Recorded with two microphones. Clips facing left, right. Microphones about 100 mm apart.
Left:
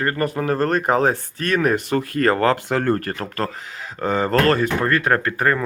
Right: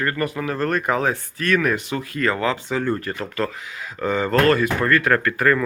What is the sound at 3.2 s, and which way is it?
Speech, 40° left (ahead or behind).